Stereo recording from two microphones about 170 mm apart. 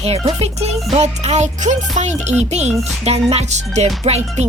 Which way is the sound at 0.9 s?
40° right (ahead or behind).